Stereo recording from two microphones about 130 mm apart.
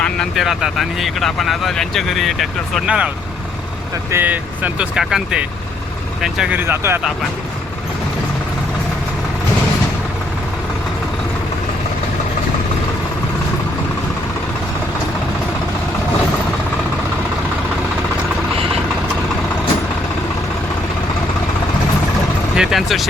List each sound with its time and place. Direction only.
0.0 s speech: centre (ahead or behind)
4.1 s speech: 15° right (ahead or behind)
6.6 s speech: 20° right (ahead or behind)
22.5 s speech: 5° right (ahead or behind)